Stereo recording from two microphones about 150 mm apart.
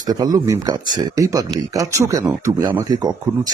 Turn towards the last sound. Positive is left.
turn(degrees=-25)  # may be behind; listen again after turning